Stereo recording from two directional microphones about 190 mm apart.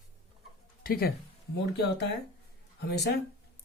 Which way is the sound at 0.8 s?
50° left (ahead or behind).